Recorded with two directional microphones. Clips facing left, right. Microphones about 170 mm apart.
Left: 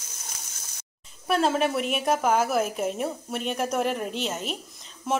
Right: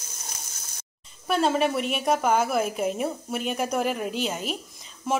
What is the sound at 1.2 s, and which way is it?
A woman's voice, centre (ahead or behind).